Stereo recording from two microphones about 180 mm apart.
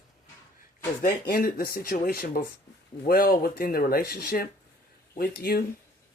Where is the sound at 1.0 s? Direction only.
50° left (ahead or behind).